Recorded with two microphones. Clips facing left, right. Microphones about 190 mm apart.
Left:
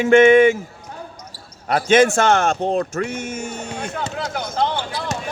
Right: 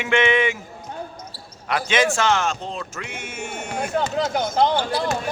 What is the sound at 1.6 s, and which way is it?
A man's voice, 45° left (ahead or behind).